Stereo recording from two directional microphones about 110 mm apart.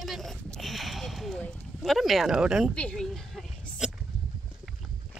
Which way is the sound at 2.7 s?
10° left (ahead or behind).